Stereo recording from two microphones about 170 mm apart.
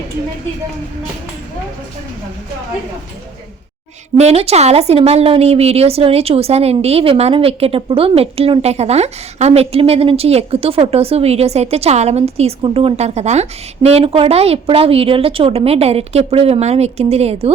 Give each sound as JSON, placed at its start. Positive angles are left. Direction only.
{"t": 4.2, "sound": "a woman's voice", "side_deg": -35}